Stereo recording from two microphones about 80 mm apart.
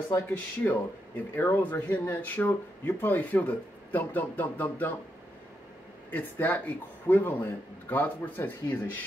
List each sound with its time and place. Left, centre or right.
0.1 s speech: left
6.0 s speech: left